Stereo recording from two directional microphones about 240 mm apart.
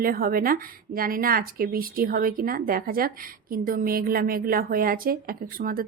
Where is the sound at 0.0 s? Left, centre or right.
Right.